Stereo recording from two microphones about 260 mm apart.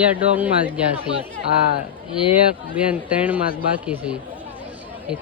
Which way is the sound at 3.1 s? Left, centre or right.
Centre.